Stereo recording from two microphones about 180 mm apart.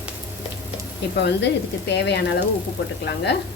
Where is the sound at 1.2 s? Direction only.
70° left (ahead or behind).